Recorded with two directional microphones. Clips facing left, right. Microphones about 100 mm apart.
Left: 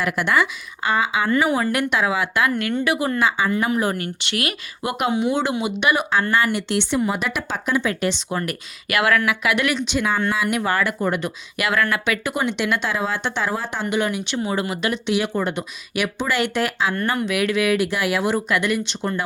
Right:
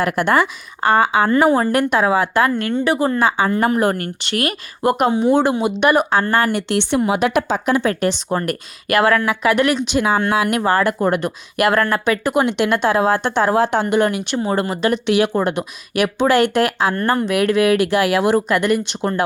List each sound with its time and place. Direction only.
0.0 s speech: 45° right (ahead or behind)
1.4 s speech: 35° right (ahead or behind); by 7.9 s 70° right (ahead or behind)
8.3 s speech: 40° right (ahead or behind); by 10.6 s 60° right (ahead or behind)
10.6 s speech: 35° right (ahead or behind)
11.8 s speech: 40° right (ahead or behind)
12.3 s a woman's voice: 60° right (ahead or behind)
13.6 s a woman's voice: 75° right (ahead or behind)
13.8 s speech: 45° right (ahead or behind)
15.0 s a woman's voice: 60° right (ahead or behind)
16.9 s speech: 35° right (ahead or behind)
17.7 s a woman's voice: 60° right (ahead or behind)
18.4 s speech: 45° right (ahead or behind)